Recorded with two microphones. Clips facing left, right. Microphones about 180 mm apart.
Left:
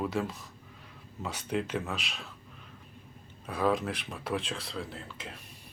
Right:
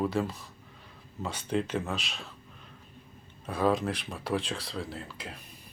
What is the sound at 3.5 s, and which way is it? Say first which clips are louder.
Speech: right 2 dB; centre (ahead or behind).